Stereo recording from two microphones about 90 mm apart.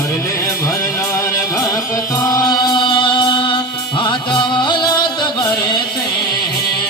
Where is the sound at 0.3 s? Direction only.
30° left (ahead or behind).